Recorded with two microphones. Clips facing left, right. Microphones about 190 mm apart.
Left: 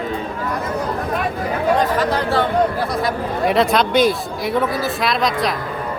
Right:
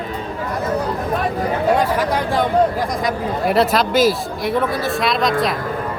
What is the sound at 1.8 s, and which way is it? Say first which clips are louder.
Chatter: even; 15° right (ahead or behind).